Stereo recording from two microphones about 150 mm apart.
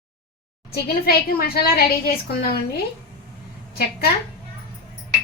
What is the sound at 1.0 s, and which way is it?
Speech, 90° left.